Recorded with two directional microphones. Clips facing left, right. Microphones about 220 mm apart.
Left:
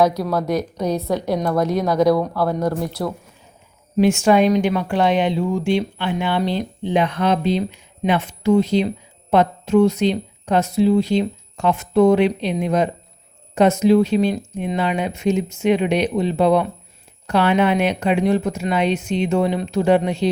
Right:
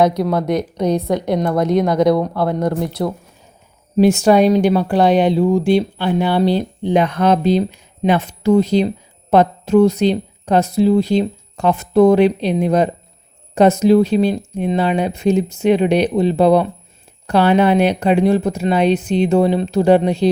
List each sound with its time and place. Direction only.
0.0 s a woman's voice: 20° right (ahead or behind)
3.9 s speech: 35° right (ahead or behind)